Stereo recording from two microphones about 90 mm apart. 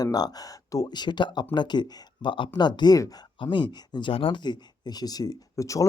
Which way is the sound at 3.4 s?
65° left (ahead or behind).